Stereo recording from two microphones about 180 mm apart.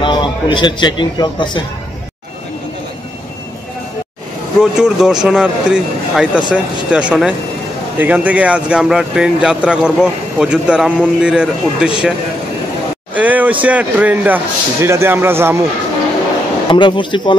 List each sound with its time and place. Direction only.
0.0 s a man's voice: 25° left (ahead or behind)
4.6 s speech: 5° right (ahead or behind)
13.1 s speech: 10° right (ahead or behind)
16.7 s speech: 25° left (ahead or behind)